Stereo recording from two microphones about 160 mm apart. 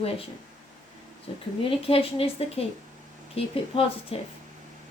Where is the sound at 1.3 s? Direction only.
35° left (ahead or behind).